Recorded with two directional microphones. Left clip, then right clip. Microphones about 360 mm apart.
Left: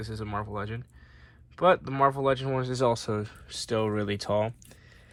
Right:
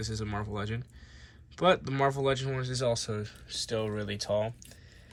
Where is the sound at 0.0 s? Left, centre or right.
Centre.